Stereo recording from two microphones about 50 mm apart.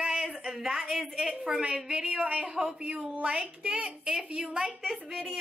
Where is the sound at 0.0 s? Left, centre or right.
Centre.